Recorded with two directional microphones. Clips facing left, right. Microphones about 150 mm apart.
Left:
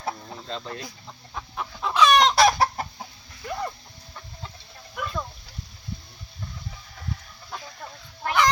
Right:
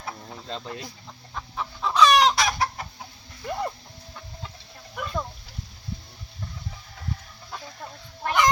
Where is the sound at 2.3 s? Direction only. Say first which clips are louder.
Left 6 dB; 35° left (ahead or behind).